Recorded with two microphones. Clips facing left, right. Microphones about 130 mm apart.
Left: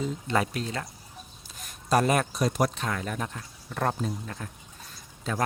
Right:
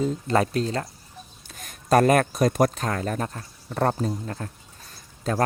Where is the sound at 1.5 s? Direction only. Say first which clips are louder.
Right 5 dB; 55° right (ahead or behind).